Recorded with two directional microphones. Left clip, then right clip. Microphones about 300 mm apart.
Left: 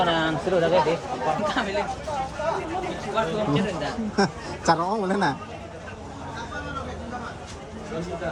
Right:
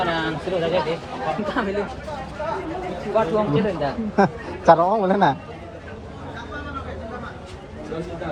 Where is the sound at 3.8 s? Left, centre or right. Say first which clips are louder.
Right 5 dB; centre.